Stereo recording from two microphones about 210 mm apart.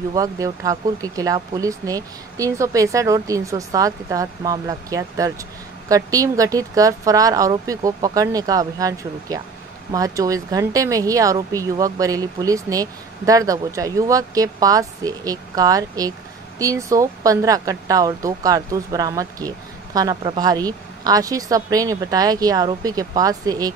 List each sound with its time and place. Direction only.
0.1 s speech: 15° right (ahead or behind)